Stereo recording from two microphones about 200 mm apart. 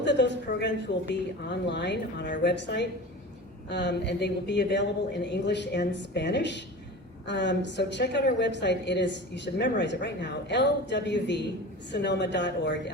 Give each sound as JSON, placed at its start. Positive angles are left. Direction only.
{"t": 0.0, "sound": "a woman's voice", "side_deg": 60}